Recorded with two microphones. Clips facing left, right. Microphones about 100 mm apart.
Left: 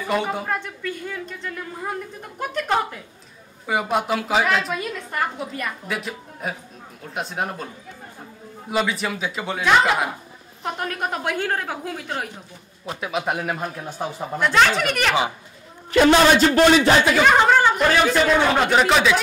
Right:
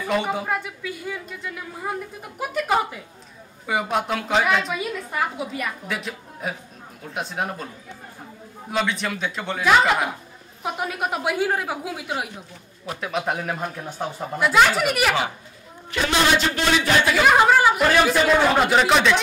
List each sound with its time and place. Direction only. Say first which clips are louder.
0.0 s a woman's voice: even; centre (ahead or behind)
13.0 s a woman's voice: left 1 dB; 5° left (ahead or behind)
16.3 s a man's voice: left 7 dB; 40° left (ahead or behind)
17.1 s a woman's voice: even; 5° right (ahead or behind)